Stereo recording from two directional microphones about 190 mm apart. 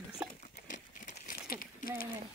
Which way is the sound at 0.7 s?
45° left (ahead or behind).